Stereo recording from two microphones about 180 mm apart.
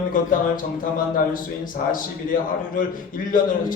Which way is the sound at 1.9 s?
50° left (ahead or behind).